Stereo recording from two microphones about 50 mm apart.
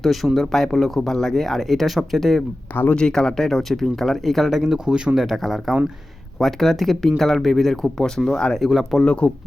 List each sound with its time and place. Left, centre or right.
0.0 s speech: centre
2.9 s speech: centre
5.2 s speech: centre
7.8 s speech: centre
8.7 s speech: centre
9.2 s speech: centre